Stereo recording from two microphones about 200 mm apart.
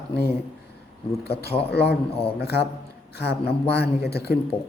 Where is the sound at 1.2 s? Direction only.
55° left (ahead or behind).